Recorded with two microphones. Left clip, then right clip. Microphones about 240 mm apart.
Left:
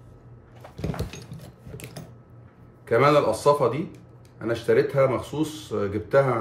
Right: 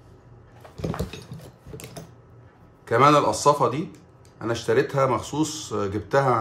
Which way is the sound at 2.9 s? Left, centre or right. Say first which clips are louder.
Right 2 dB; centre.